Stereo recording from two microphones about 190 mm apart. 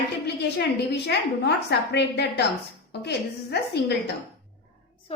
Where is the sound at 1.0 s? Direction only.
60° left (ahead or behind).